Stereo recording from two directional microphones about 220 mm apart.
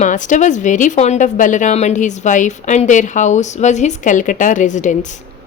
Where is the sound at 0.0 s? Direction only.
35° left (ahead or behind).